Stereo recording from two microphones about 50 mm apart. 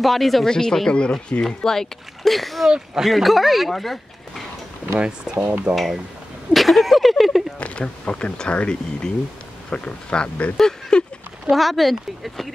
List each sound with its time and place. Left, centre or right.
0.0 s speech: centre
0.5 s speech: centre
4.9 s speech: centre
5.5 s speech: right
6.5 s speech: centre
7.5 s speech: left
10.6 s a sound: centre
11.5 s speech: centre